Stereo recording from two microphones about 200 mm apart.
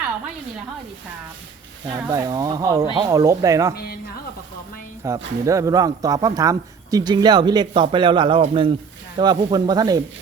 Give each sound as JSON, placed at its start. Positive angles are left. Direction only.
{"t": 1.8, "sound": "speech", "side_deg": -20}
{"t": 5.0, "sound": "speech", "side_deg": -15}